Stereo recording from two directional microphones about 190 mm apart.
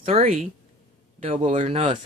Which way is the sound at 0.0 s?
30° right (ahead or behind).